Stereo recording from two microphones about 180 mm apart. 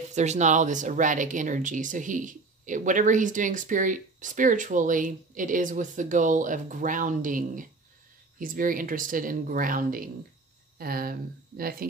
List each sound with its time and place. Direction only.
0.1 s speech: 40° right (ahead or behind); by 11.9 s 55° right (ahead or behind)